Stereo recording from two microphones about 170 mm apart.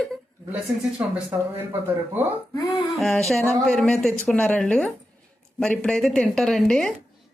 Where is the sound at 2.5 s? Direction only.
25° left (ahead or behind).